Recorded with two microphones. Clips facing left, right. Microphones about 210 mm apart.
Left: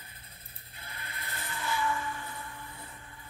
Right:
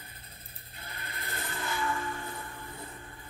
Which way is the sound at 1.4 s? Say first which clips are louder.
Left 1 dB; 50° right (ahead or behind).